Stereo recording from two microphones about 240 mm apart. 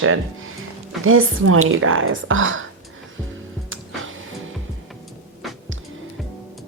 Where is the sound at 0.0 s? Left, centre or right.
Right.